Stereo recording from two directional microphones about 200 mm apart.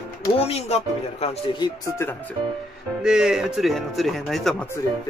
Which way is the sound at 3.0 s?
5° right (ahead or behind).